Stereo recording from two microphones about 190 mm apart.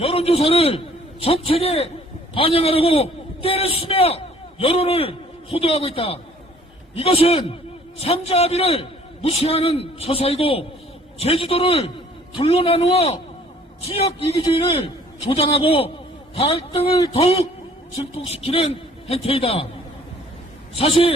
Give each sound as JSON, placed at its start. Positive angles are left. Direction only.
{"t": 0.0, "sound": "a man's voice", "side_deg": 30}
{"t": 20.7, "sound": "a man's voice", "side_deg": 30}